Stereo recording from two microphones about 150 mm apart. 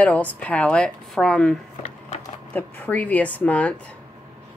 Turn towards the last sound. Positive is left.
turn(degrees=10)  # may be behind; listen again after turning